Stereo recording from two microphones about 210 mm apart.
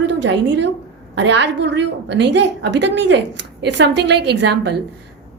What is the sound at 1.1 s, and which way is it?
A woman's voice, 55° right (ahead or behind).